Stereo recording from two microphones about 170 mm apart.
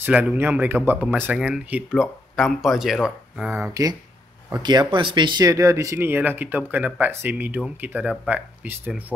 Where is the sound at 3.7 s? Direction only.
20° right (ahead or behind).